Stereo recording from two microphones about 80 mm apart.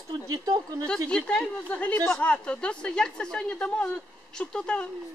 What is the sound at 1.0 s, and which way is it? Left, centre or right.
Speech, centre.